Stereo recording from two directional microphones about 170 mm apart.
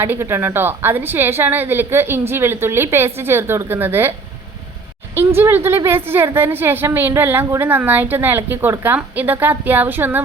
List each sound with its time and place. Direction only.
0.0 s a woman's voice: 15° right (ahead or behind)
5.1 s a woman's voice: 15° right (ahead or behind)